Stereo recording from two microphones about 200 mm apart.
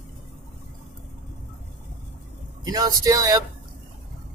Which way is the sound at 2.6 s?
20° right (ahead or behind).